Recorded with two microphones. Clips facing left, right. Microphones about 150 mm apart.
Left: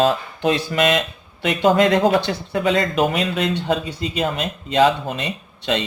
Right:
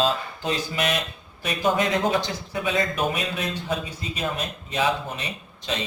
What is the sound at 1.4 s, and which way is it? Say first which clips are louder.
Speech: left 7 dB; 80° left.